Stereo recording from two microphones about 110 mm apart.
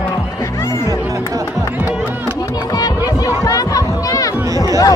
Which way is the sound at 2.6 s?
35° left (ahead or behind).